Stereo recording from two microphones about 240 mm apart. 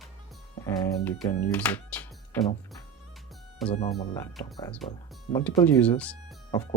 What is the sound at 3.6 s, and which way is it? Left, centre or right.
Speech, centre.